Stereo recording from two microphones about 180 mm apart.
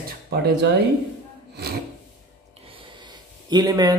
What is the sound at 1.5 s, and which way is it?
Rub, 65° right (ahead or behind).